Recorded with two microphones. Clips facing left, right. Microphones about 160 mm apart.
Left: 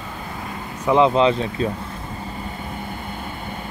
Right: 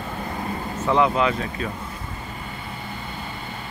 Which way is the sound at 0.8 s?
20° left (ahead or behind).